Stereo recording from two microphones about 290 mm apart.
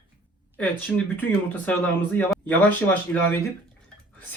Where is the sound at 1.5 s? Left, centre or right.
Centre.